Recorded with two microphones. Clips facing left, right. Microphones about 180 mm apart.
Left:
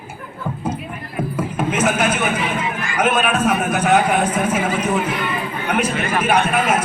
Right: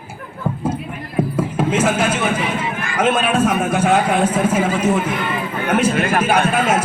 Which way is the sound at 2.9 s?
30° right (ahead or behind).